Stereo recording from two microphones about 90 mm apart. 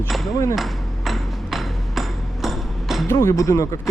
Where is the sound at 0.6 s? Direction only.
Centre (ahead or behind).